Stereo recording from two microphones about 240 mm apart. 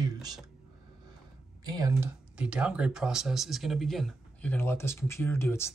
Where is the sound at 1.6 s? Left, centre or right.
Centre.